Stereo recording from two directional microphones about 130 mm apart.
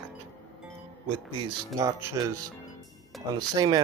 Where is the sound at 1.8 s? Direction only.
25° right (ahead or behind).